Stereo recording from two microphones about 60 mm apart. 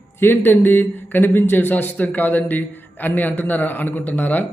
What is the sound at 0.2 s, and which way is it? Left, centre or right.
Speech, left.